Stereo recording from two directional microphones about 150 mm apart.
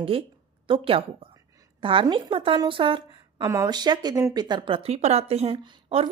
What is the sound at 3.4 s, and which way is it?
A woman's voice, 20° right (ahead or behind).